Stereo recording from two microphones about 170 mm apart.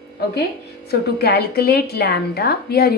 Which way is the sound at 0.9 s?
65° left (ahead or behind).